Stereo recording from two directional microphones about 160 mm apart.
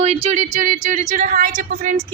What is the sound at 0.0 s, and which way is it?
Speech, 40° right (ahead or behind).